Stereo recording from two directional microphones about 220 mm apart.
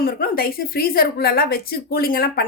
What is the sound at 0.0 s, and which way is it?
A woman's voice, 40° left (ahead or behind).